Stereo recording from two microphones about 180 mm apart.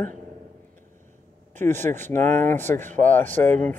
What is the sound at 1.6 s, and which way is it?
Speech, 40° right (ahead or behind).